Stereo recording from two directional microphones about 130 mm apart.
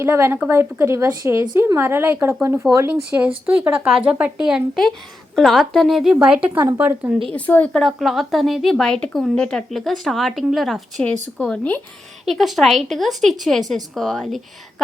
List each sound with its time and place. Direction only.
0.0 s a woman's voice: 20° right (ahead or behind)
7.3 s a woman's voice: 10° left (ahead or behind)